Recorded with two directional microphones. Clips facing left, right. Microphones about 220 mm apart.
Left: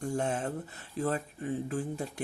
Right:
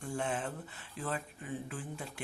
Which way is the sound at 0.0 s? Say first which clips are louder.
Left 5 dB; 40° left (ahead or behind).